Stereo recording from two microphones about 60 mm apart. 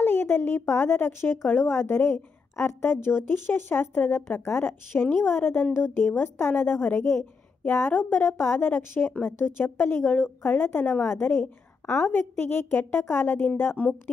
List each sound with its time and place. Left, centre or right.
0.0 s a woman's voice: left